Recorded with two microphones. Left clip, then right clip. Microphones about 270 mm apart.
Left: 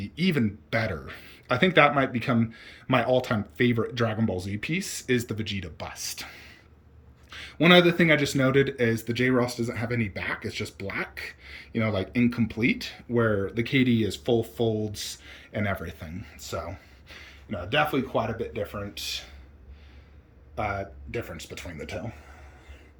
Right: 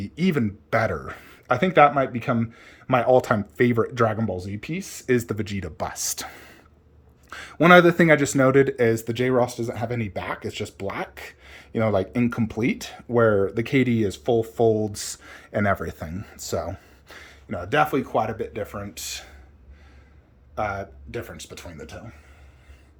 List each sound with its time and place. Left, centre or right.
0.0 s speech: centre
20.6 s speech: centre
21.3 s speech: right
21.6 s speech: centre